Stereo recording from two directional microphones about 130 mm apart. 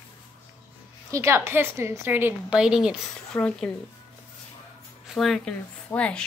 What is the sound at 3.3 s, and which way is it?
Speech, 5° left (ahead or behind).